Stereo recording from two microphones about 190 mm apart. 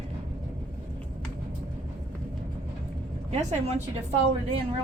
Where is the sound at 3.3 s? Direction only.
35° right (ahead or behind).